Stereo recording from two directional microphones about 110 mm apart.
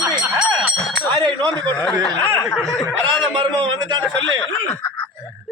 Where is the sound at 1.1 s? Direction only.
40° right (ahead or behind).